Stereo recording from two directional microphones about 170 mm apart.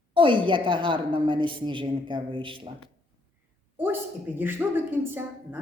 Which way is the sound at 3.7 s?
10° right (ahead or behind).